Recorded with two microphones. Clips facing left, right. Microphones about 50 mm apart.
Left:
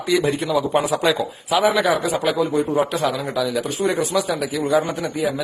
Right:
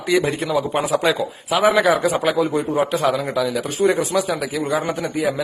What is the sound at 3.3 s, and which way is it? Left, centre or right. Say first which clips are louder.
Speech: right 1 dB; right.